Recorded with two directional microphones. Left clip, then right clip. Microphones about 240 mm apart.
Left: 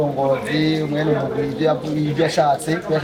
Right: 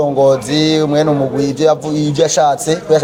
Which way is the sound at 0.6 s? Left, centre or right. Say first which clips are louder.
Right 8 dB; right.